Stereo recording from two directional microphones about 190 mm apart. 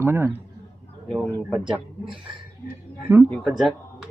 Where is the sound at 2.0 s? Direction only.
25° right (ahead or behind).